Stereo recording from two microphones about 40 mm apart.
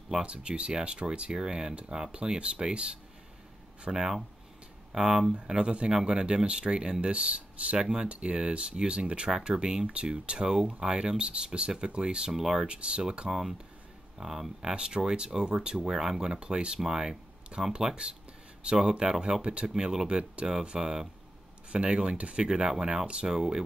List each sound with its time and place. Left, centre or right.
0.2 s speech: right
3.9 s speech: centre
12.3 s speech: centre
12.5 s speech: right
13.3 s speech: centre
21.7 s speech: right
22.5 s speech: centre